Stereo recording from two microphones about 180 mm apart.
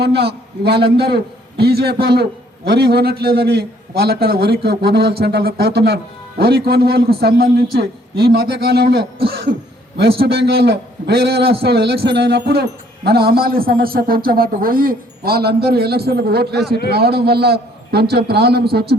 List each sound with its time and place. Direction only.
0.0 s a man's voice: 65° right (ahead or behind)